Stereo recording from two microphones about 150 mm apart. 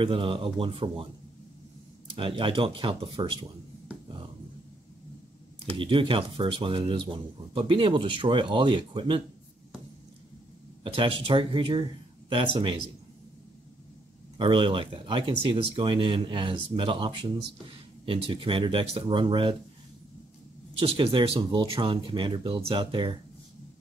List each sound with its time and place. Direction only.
0.0 s speech: 35° right (ahead or behind)
2.0 s speech: 35° right (ahead or behind)
5.8 s speech: 35° right (ahead or behind)
10.8 s speech: 35° right (ahead or behind)
14.4 s speech: 35° right (ahead or behind)
20.7 s speech: 35° right (ahead or behind)